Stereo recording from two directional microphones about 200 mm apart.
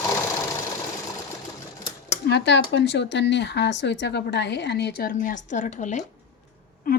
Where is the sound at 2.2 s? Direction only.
60° left (ahead or behind); by 6.1 s 35° left (ahead or behind).